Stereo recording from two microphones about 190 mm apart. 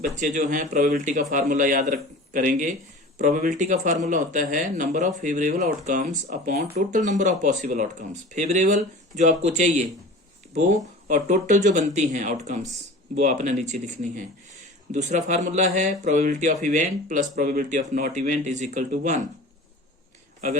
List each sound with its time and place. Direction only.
0.0 s a man's voice: 45° right (ahead or behind)